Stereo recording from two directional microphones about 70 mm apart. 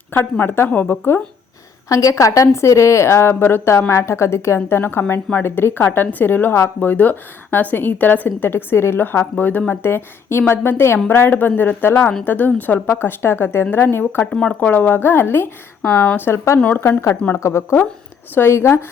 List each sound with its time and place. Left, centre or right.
0.1 s a woman's voice: left
1.9 s a woman's voice: left
14.3 s speech: centre
14.7 s a woman's voice: left